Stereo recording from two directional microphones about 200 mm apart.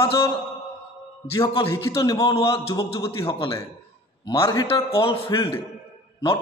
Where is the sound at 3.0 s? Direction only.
15° left (ahead or behind).